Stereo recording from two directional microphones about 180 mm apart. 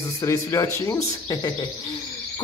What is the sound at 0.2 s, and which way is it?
Speech, 20° left (ahead or behind).